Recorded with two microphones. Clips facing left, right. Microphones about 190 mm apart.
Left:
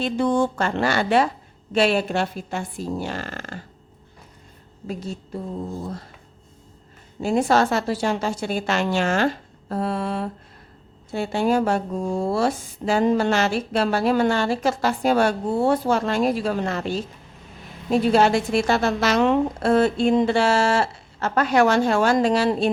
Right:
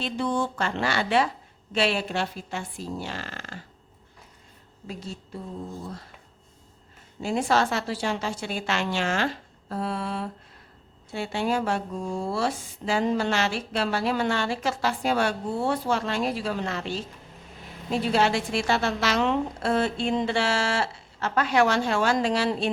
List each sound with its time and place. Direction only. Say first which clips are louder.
0.0 s speech: left 6 dB; 45° left (ahead or behind)
4.9 s speech: left 6 dB; 45° left (ahead or behind)
7.2 s speech: left 5 dB; 45° left (ahead or behind)